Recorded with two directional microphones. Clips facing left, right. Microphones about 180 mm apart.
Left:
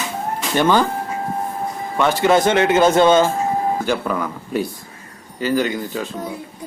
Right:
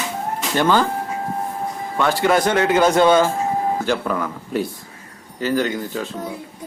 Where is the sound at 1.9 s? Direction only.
20° left (ahead or behind).